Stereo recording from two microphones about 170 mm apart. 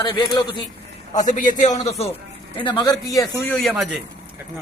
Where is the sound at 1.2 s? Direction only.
50° left (ahead or behind).